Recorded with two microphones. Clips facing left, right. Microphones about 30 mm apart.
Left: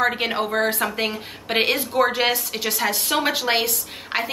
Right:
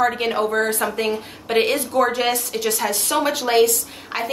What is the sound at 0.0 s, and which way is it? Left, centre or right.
A woman's voice, left.